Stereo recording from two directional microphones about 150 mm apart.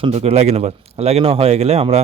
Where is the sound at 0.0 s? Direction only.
40° right (ahead or behind).